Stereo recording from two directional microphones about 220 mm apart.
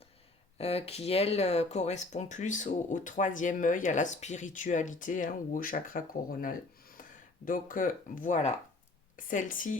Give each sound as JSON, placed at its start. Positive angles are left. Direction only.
{"t": 0.6, "sound": "speech", "side_deg": 25}
{"t": 7.4, "sound": "speech", "side_deg": 40}